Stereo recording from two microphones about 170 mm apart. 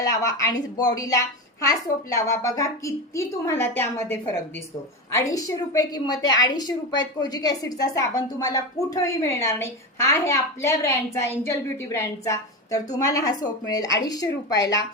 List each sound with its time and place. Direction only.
0.0 s a woman's voice: 20° left (ahead or behind)